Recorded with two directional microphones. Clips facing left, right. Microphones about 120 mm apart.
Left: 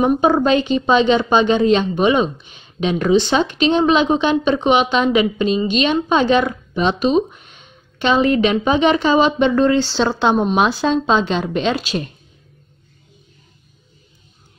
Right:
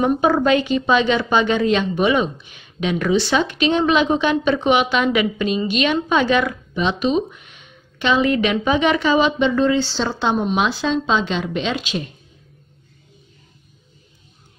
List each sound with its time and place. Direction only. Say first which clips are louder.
0.0 s a woman's voice: left 2 dB; 20° left (ahead or behind)
9.4 s a woman's voice: left 3 dB; 55° left (ahead or behind)
9.9 s speech: left 4 dB; 65° left (ahead or behind)
10.3 s a woman's voice: left 3 dB; 45° left (ahead or behind)